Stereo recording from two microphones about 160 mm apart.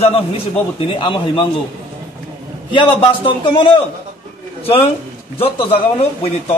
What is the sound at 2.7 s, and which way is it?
A man's voice, 30° left (ahead or behind).